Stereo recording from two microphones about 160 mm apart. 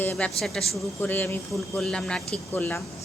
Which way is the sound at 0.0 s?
10° left (ahead or behind).